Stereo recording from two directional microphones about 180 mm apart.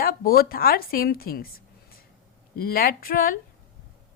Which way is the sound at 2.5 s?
55° left (ahead or behind).